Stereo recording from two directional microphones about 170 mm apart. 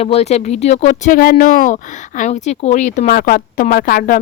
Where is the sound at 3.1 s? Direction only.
60° left (ahead or behind).